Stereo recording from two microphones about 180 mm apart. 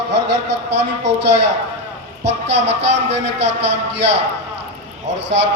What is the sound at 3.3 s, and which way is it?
Speech, 75° right (ahead or behind).